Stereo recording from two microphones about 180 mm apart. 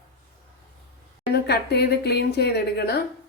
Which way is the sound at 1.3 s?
65° left (ahead or behind).